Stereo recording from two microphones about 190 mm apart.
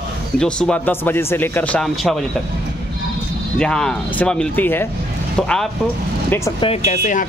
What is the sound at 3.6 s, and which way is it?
Speech, 5° left (ahead or behind).